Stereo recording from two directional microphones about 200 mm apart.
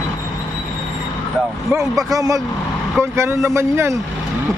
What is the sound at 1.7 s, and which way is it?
A man's voice, 15° right (ahead or behind).